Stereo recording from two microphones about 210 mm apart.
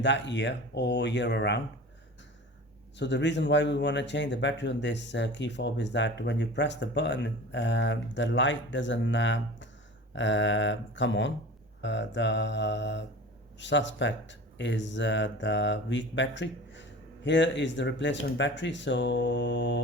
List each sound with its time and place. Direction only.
0.0 s speech: 55° left (ahead or behind)
3.0 s speech: 55° left (ahead or behind)